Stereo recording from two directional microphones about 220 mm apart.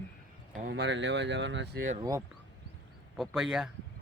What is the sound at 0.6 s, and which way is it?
Speech, 50° right (ahead or behind).